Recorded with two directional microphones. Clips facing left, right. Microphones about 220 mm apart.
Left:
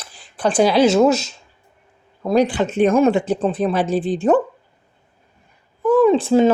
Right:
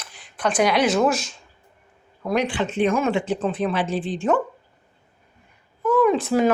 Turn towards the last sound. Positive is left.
turn(degrees=30)  # may be behind; listen again after turning